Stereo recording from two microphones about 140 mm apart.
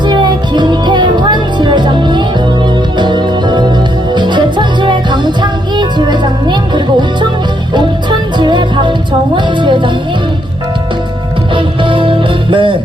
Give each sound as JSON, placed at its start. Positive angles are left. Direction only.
{"t": 0.0, "sound": "music", "side_deg": -35}
{"t": 8.4, "sound": "music", "side_deg": -35}
{"t": 11.5, "sound": "music", "side_deg": -35}